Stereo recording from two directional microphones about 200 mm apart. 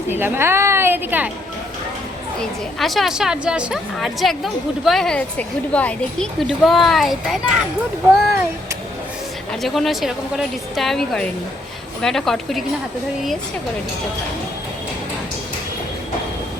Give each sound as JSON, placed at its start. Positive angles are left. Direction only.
{"t": 0.1, "sound": "a woman's voice", "side_deg": -10}
{"t": 2.4, "sound": "a woman's voice", "side_deg": 0}
{"t": 9.5, "sound": "a woman's voice", "side_deg": 0}